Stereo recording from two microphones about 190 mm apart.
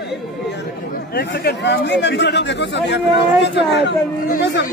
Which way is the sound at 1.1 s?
55° left (ahead or behind).